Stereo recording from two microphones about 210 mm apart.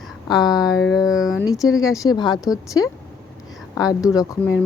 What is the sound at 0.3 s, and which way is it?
Speech, 20° left (ahead or behind).